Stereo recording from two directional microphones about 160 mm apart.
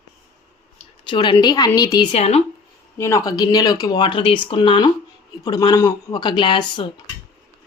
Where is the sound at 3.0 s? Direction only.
20° left (ahead or behind).